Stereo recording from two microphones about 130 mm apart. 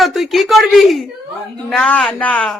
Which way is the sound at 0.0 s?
Centre (ahead or behind).